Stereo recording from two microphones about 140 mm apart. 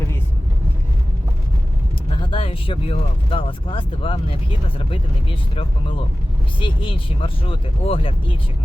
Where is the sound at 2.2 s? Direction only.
40° left (ahead or behind).